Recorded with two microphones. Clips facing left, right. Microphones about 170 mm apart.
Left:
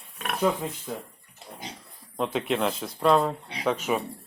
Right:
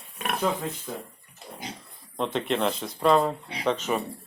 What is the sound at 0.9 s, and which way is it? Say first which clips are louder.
Speech: left 1 dB; 10° left (ahead or behind).